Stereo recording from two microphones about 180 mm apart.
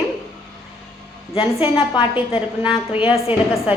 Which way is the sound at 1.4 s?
25° left (ahead or behind).